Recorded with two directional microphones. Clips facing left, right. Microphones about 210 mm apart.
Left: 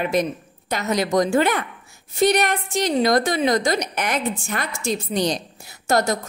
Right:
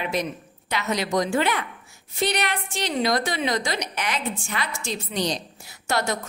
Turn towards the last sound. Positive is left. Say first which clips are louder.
# left 5 dB
turn(degrees=40)  # may be behind; listen again after turning